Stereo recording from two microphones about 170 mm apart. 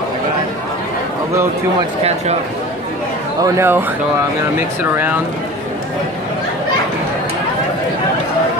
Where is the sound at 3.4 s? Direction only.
15° right (ahead or behind).